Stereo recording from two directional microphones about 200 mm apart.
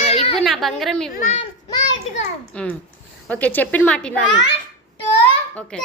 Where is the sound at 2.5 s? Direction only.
5° left (ahead or behind).